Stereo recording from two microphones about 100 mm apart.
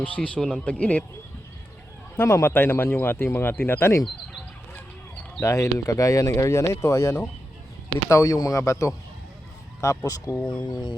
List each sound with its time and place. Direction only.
0.2 s speech: 10° left (ahead or behind)
2.1 s speech: 25° left (ahead or behind)
5.4 s speech: 30° left (ahead or behind)
10.3 s speech: 10° left (ahead or behind)
10.6 s a sound: 50° left (ahead or behind)